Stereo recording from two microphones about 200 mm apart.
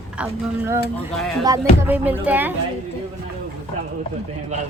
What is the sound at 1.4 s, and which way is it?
A woman's voice, 15° right (ahead or behind).